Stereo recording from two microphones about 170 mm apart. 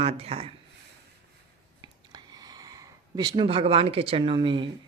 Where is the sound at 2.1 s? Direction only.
25° right (ahead or behind).